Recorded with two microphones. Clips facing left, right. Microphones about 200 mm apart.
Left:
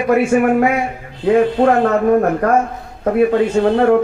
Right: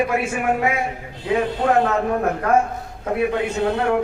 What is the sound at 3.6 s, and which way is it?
Speech, 50° left (ahead or behind).